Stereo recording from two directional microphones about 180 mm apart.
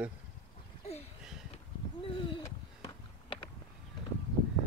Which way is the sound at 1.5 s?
30° left (ahead or behind).